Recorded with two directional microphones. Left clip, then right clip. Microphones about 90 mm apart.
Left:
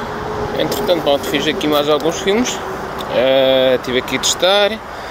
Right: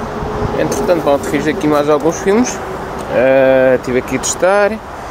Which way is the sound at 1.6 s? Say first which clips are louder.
Right 4 dB; 25° left (ahead or behind).